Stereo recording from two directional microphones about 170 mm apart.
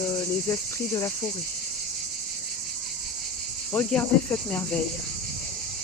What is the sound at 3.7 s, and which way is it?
Speech, 10° left (ahead or behind).